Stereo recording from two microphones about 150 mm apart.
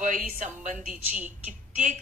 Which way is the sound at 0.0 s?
60° right (ahead or behind).